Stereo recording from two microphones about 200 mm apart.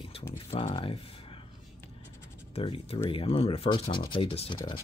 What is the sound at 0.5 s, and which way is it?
Speech, 30° left (ahead or behind).